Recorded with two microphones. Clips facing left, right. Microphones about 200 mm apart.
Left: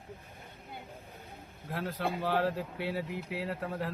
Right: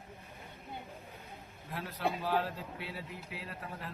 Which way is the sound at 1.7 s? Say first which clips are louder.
Left 2 dB; 65° left (ahead or behind).